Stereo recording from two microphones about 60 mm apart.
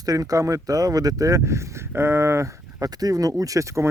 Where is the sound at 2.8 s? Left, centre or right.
Right.